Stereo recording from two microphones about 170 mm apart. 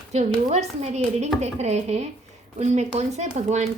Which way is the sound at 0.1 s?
40° right (ahead or behind).